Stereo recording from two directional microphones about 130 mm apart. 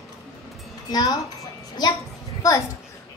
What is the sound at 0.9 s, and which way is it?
A child's voice, 30° left (ahead or behind).